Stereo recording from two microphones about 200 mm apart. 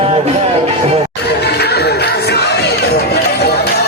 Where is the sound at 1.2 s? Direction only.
55° left (ahead or behind).